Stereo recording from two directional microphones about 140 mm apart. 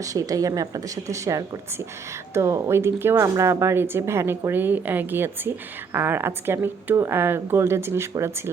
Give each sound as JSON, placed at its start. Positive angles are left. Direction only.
{"t": 0.0, "sound": "speech", "side_deg": -25}